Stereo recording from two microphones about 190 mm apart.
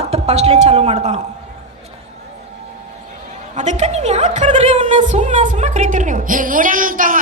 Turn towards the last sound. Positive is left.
turn(degrees=-45)  # may be behind; listen again after turning